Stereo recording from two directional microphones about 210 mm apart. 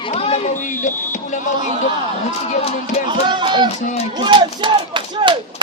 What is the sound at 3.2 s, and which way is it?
Speech, 20° right (ahead or behind).